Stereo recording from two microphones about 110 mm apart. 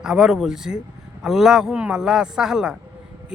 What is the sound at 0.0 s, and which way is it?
A man's voice, 5° right (ahead or behind).